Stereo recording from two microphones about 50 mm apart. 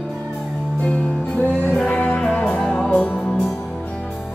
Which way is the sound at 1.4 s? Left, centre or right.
Left.